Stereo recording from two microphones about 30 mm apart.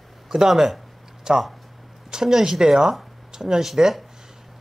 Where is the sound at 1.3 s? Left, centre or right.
Right.